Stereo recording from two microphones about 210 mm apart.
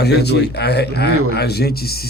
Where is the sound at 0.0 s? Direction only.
50° left (ahead or behind).